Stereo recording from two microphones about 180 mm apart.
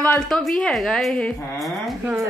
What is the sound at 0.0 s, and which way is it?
Speech, 5° left (ahead or behind).